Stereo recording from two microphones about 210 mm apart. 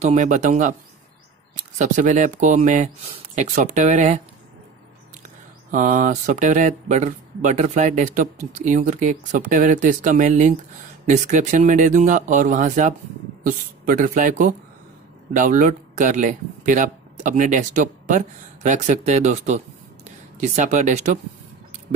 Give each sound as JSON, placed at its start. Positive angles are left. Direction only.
{"t": 0.0, "sound": "speech", "side_deg": -35}
{"t": 1.8, "sound": "speech", "side_deg": -35}
{"t": 5.7, "sound": "speech", "side_deg": -35}